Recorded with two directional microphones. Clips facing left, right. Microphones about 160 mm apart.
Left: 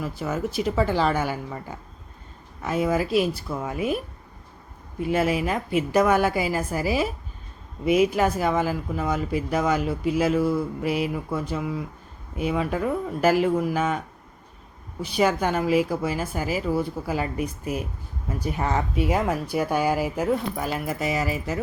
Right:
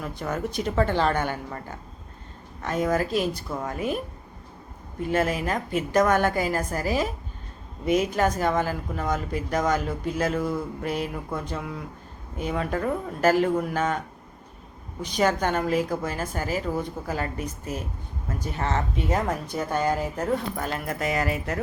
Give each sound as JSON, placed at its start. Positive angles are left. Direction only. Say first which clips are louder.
{"t": 0.0, "sound": "a woman's voice", "louder": "left 2 dB", "side_deg": 5}
{"t": 5.0, "sound": "speech", "louder": "left 2 dB", "side_deg": 10}
{"t": 15.0, "sound": "speech", "louder": "left 1 dB", "side_deg": 10}